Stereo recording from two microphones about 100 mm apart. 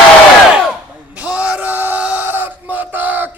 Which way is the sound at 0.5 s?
10° right (ahead or behind).